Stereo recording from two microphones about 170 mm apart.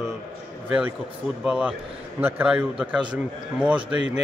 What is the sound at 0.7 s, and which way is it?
Speech, 10° right (ahead or behind).